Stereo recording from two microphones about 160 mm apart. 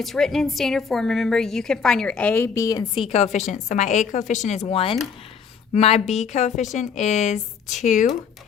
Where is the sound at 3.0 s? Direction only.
40° left (ahead or behind).